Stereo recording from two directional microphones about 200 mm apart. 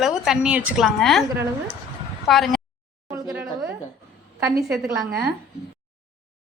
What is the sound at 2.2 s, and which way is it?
Speech, centre (ahead or behind).